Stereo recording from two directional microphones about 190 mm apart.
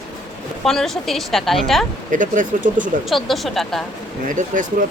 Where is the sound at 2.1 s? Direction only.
45° right (ahead or behind).